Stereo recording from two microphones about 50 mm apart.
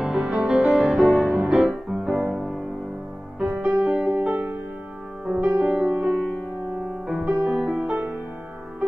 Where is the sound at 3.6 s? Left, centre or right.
Centre.